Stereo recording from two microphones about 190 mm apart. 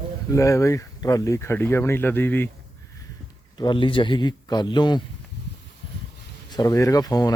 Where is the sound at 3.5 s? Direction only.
25° left (ahead or behind).